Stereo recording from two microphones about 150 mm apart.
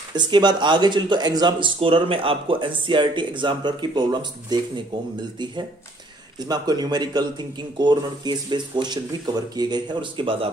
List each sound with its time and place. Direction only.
0.1 s speech: 30° right (ahead or behind)
6.4 s speech: 25° right (ahead or behind)